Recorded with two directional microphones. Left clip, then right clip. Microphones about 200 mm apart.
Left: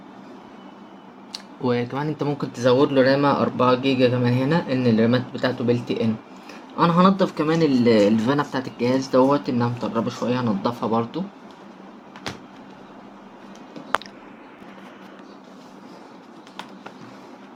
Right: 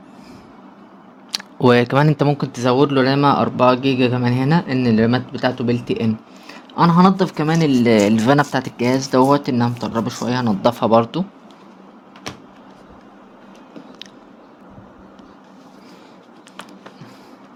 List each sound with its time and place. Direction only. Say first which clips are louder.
1.3 s speech: right 10 dB; 55° right (ahead or behind)